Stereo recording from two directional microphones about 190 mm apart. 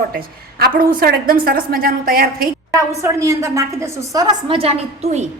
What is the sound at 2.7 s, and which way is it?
A woman's voice, 15° right (ahead or behind).